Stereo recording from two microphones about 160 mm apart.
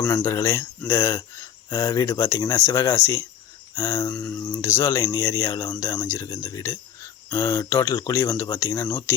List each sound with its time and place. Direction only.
0.1 s speech: 20° left (ahead or behind)
4.1 s speech: 5° left (ahead or behind)
4.4 s speech: 20° left (ahead or behind)